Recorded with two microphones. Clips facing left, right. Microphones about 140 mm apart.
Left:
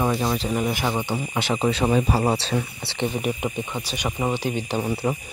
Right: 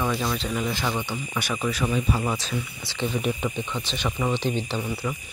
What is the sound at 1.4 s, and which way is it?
Speech, 30° left (ahead or behind).